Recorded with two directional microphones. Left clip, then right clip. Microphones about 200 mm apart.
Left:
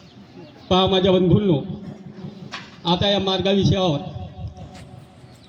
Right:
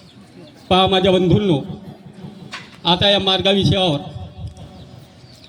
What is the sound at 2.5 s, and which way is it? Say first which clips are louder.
A man's voice: right 5 dB; 15° right (ahead or behind).